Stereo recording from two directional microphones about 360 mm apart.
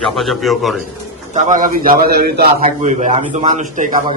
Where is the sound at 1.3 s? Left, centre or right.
Centre.